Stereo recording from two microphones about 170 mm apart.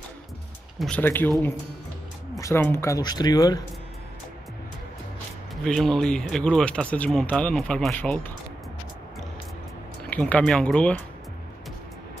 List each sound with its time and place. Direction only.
0.7 s speech: 5° left (ahead or behind)
2.3 s speech: 15° left (ahead or behind)
5.6 s speech: centre (ahead or behind)
10.0 s speech: 10° left (ahead or behind)